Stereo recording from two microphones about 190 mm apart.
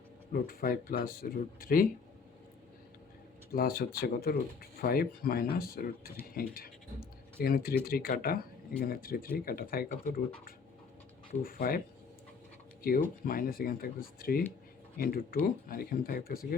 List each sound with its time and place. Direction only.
0.3 s speech: 50° left (ahead or behind)
3.5 s speech: 50° left (ahead or behind)
12.8 s speech: 50° left (ahead or behind)